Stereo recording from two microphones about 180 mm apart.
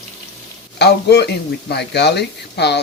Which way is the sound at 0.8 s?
65° left (ahead or behind).